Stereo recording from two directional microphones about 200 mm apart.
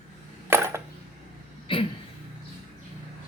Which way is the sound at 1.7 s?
25° left (ahead or behind).